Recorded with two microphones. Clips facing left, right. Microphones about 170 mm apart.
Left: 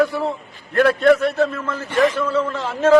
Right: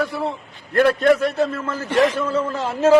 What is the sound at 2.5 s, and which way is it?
Speech, 30° right (ahead or behind).